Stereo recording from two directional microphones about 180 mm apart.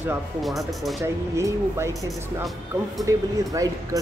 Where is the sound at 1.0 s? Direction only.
15° right (ahead or behind).